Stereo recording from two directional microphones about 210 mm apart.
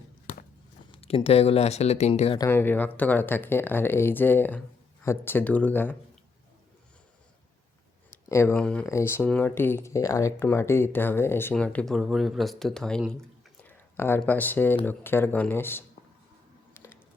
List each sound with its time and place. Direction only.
0.9 s speech: 30° left (ahead or behind)
2.4 s speech: 10° left (ahead or behind)
8.3 s speech: 15° left (ahead or behind)
16.7 s a sound: 10° left (ahead or behind)